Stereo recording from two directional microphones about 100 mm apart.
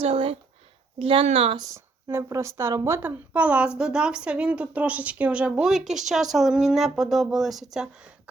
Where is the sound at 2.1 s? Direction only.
30° right (ahead or behind).